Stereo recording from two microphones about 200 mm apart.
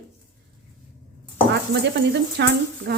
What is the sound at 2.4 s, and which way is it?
Speech, 60° right (ahead or behind).